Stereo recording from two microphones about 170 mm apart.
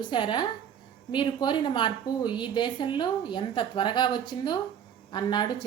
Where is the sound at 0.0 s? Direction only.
30° left (ahead or behind).